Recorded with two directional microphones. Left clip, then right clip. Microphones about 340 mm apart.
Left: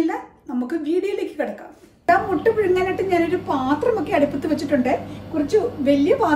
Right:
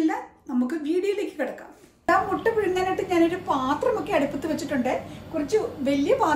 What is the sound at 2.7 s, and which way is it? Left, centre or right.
A woman's voice, centre.